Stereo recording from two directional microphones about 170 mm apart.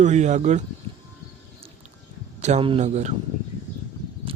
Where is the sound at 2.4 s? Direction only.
40° right (ahead or behind).